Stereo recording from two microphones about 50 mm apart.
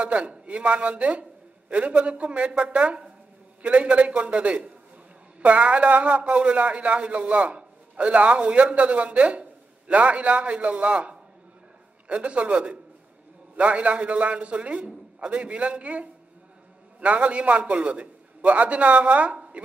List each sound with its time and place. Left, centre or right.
0.0 s a man's voice: right